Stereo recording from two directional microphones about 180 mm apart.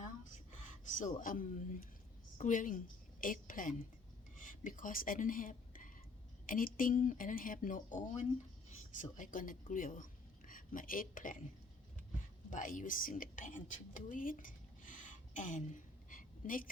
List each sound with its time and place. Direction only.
0.9 s a woman's voice: 45° left (ahead or behind)
12.5 s a woman's voice: 45° left (ahead or behind)